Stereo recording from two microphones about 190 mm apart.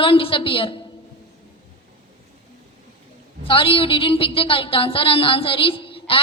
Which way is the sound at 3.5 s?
30° left (ahead or behind).